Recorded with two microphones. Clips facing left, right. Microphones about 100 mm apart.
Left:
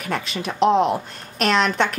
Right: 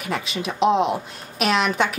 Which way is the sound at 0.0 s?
Centre (ahead or behind).